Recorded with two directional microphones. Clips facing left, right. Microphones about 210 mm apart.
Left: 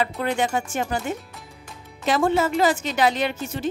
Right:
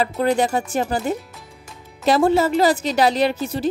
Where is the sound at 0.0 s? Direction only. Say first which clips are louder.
Right 5 dB; 35° right (ahead or behind).